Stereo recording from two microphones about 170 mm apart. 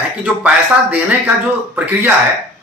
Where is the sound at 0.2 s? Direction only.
10° right (ahead or behind).